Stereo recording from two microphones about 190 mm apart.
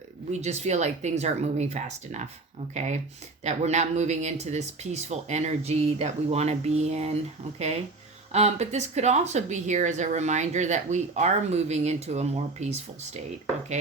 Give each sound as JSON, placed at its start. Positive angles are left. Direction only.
{"t": 0.3, "sound": "speech", "side_deg": -35}
{"t": 8.3, "sound": "speech", "side_deg": -35}